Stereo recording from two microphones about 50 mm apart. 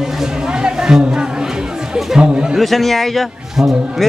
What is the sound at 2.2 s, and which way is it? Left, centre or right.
Speech, centre.